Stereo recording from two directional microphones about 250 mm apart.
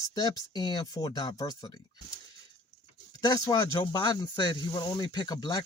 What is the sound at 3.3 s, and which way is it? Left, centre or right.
Speech, centre.